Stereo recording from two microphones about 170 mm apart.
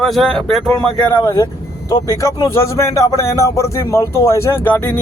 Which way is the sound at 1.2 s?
20° left (ahead or behind).